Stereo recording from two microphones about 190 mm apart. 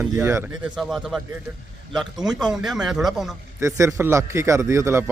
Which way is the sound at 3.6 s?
15° right (ahead or behind).